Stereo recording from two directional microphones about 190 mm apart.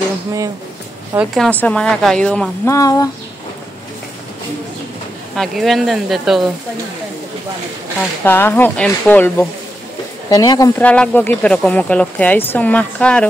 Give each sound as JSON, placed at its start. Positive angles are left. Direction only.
{"t": 1.1, "sound": "speech", "side_deg": 0}
{"t": 2.7, "sound": "a woman's voice", "side_deg": 20}
{"t": 5.3, "sound": "speech", "side_deg": 0}
{"t": 8.2, "sound": "a woman's voice", "side_deg": 10}
{"t": 10.9, "sound": "a woman's voice", "side_deg": 10}